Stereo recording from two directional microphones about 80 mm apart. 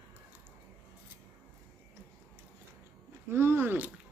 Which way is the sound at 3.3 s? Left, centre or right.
Right.